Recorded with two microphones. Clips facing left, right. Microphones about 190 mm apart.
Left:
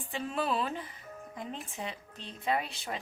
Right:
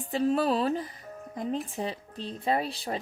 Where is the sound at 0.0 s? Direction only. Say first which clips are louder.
Right 8 dB; 40° right (ahead or behind).